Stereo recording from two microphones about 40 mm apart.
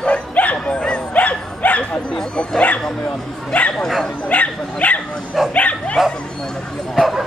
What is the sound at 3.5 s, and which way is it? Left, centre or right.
Bow-wow, left.